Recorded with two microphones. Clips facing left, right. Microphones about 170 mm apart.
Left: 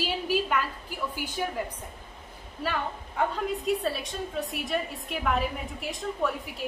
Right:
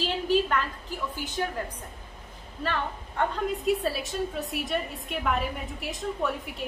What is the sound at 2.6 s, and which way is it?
A woman's voice, 5° left (ahead or behind).